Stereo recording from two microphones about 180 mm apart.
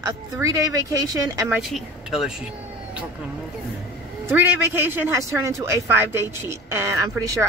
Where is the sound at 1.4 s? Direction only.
Centre (ahead or behind).